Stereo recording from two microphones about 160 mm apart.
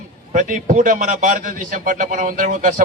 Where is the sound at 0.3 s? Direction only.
55° right (ahead or behind).